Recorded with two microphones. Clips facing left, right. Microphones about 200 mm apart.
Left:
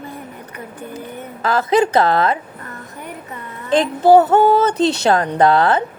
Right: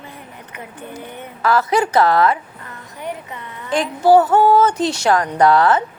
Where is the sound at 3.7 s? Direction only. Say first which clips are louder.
Left 2 dB; 25° left (ahead or behind).